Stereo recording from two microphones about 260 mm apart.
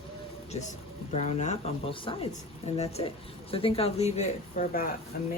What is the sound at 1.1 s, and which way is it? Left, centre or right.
Speech, left.